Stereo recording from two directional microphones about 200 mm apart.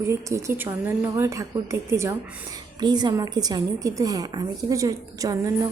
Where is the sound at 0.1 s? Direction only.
15° right (ahead or behind).